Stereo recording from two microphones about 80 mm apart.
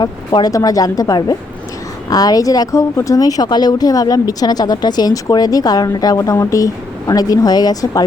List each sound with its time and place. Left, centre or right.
0.0 s speech: left
0.5 s speech: left